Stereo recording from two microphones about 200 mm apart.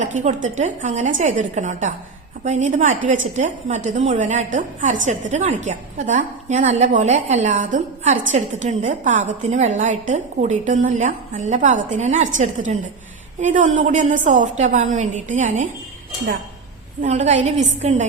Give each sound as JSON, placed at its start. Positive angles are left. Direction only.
{"t": 0.0, "sound": "a woman's voice", "side_deg": -35}
{"t": 17.0, "sound": "a woman's voice", "side_deg": -35}